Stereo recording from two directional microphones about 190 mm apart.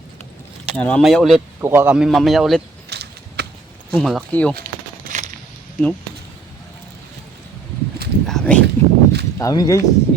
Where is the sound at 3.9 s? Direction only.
Centre (ahead or behind).